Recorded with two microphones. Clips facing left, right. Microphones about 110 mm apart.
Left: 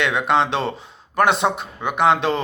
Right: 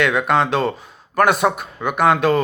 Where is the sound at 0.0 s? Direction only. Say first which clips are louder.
Right 2 dB; 20° left (ahead or behind).